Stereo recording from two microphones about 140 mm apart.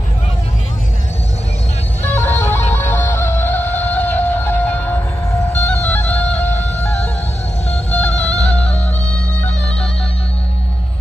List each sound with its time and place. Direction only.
2.0 s music: 15° left (ahead or behind)
8.1 s music: 50° left (ahead or behind)
8.5 s music: 10° left (ahead or behind)